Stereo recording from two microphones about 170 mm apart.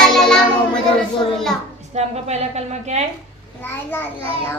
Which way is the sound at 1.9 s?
40° right (ahead or behind).